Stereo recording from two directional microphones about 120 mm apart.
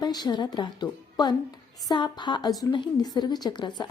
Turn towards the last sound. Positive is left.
turn(degrees=40)  # may be behind; listen again after turning